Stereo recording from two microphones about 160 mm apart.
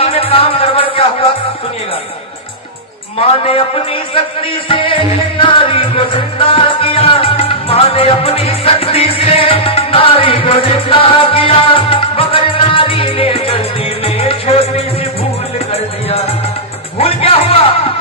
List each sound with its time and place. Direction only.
0.0 s music: 35° left (ahead or behind)
3.2 s a man's voice: 35° left (ahead or behind)
4.7 s music: 35° left (ahead or behind)